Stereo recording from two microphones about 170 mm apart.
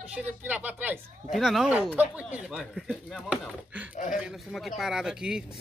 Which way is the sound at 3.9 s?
50° left (ahead or behind).